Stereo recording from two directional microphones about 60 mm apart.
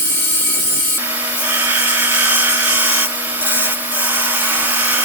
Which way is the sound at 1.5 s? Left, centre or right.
Right.